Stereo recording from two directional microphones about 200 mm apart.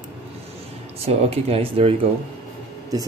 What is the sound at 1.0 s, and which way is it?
Speech, 30° right (ahead or behind).